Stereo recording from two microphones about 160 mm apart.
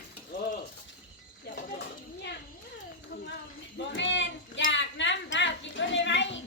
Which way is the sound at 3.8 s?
90° left.